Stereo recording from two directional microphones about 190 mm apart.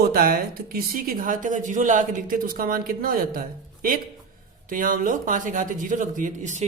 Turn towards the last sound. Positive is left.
turn(degrees=-40)  # may be behind; listen again after turning